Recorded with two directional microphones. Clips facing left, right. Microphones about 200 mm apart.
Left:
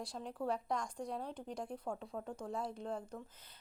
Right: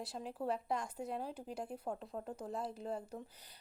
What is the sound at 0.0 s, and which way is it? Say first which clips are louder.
A woman's voice: even; 5° right (ahead or behind).